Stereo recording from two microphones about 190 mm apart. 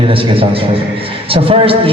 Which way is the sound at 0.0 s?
30° right (ahead or behind).